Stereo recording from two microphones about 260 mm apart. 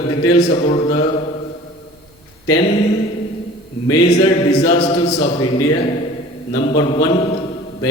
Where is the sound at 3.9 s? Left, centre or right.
Centre.